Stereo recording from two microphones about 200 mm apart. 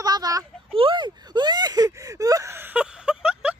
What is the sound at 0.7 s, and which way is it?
Whimper, 25° right (ahead or behind).